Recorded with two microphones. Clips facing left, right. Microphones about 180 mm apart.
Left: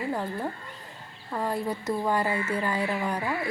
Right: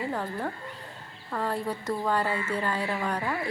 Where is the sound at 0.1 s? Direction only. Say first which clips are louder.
Left 1 dB; 10° left (ahead or behind).